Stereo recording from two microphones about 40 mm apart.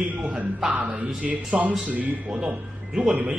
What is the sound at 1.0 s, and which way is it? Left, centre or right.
Speech, right.